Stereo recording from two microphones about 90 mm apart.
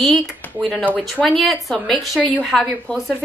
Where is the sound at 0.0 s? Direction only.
Centre (ahead or behind).